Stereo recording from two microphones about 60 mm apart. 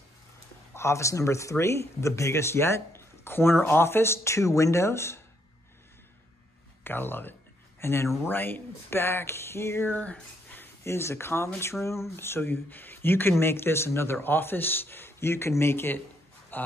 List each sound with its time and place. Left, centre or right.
0.7 s speech: left
6.8 s speech: left
9.9 s speech: left
10.8 s a man's voice: left